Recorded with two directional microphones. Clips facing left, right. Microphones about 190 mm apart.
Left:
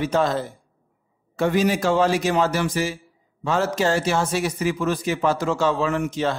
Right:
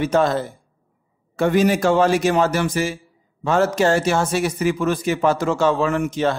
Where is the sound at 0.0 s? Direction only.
55° right (ahead or behind).